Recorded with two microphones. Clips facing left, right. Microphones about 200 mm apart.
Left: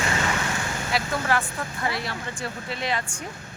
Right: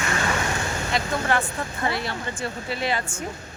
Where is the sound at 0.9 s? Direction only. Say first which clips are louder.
Right 1 dB; centre (ahead or behind).